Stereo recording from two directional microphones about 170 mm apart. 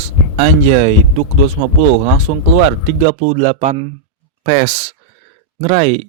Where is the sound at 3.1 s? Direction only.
40° right (ahead or behind).